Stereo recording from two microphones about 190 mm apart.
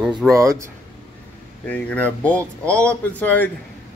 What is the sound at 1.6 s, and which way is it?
Speech, 5° left (ahead or behind).